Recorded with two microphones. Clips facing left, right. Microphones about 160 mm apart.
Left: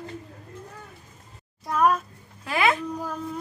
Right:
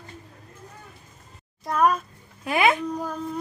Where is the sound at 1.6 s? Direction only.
Centre (ahead or behind).